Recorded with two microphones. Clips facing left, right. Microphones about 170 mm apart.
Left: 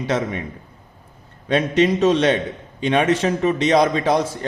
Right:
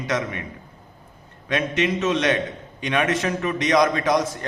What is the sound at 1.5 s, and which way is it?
A man's voice, 35° left (ahead or behind).